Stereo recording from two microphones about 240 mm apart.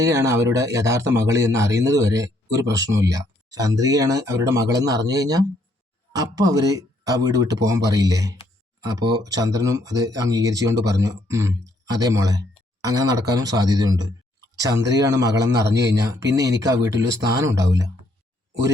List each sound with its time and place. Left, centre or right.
0.0 s speech: centre